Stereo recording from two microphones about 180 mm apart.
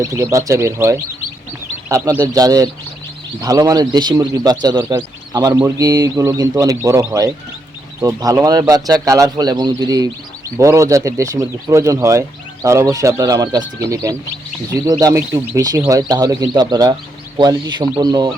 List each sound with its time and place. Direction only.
0.0 s speech: 15° right (ahead or behind)
2.2 s speech: 20° right (ahead or behind)